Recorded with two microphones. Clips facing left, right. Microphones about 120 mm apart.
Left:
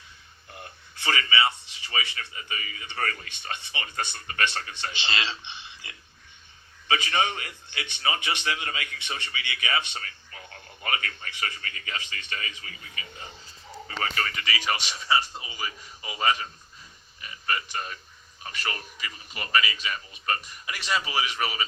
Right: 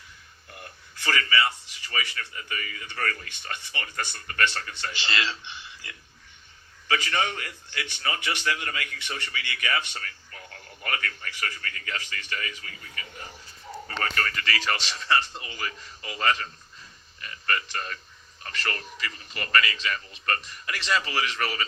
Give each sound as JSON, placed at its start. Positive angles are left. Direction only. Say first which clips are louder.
{"t": 0.5, "sound": "a man's voice", "louder": "left 1 dB", "side_deg": 20}
{"t": 13.8, "sound": "a man's voice", "louder": "even", "side_deg": 15}